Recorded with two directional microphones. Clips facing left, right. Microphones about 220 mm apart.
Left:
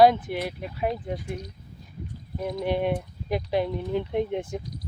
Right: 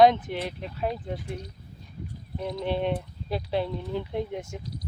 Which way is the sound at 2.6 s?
10° left (ahead or behind).